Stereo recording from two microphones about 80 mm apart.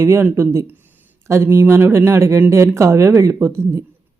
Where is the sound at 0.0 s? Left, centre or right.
Right.